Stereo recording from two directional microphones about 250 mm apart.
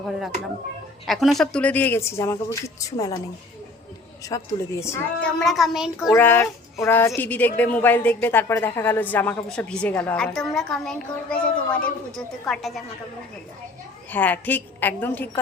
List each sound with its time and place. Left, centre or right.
1.0 s a woman's voice: centre
4.3 s a woman's voice: centre
6.1 s a woman's voice: centre
14.1 s a woman's voice: centre